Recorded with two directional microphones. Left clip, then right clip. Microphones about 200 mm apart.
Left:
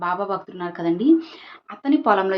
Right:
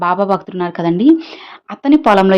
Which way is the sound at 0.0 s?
50° right (ahead or behind).